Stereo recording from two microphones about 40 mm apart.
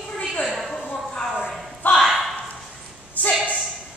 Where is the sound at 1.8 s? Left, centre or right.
Left.